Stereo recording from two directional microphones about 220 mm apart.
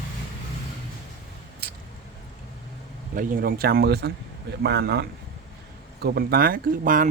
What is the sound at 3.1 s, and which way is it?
Speech, 40° right (ahead or behind).